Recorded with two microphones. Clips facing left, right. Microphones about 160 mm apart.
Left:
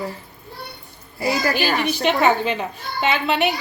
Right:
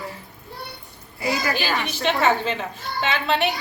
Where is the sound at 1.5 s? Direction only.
15° left (ahead or behind).